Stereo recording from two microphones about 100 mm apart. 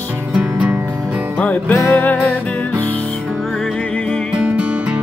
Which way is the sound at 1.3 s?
15° left (ahead or behind).